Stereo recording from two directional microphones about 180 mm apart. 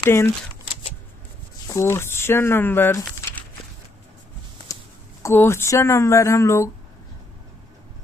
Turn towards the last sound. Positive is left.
turn(degrees=15)  # may be behind; listen again after turning